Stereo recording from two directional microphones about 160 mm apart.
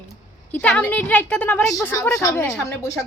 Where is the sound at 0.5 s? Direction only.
5° left (ahead or behind).